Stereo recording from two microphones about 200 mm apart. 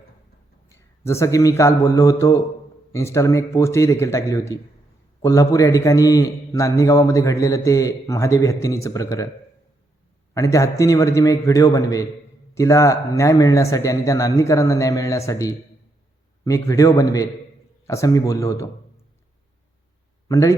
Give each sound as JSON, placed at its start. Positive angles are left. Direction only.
{"t": 0.7, "sound": "a man's voice", "side_deg": 15}
{"t": 10.3, "sound": "a man's voice", "side_deg": 15}
{"t": 20.2, "sound": "speech", "side_deg": 15}